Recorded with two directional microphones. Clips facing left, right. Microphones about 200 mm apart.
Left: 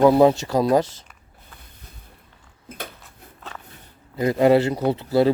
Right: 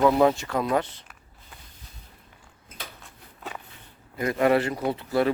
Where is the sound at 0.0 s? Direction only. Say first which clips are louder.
Left 5 dB; 30° left (ahead or behind).